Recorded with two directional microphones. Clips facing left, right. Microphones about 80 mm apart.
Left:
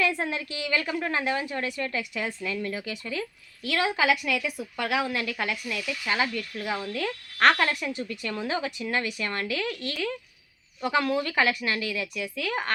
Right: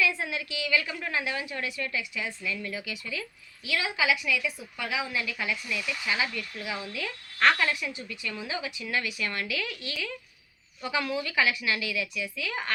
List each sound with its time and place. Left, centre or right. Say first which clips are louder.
0.0 s a woman's voice: left 2 dB; left
5.8 s frog: left 1 dB; right
6.1 s a woman's voice: left 4 dB; left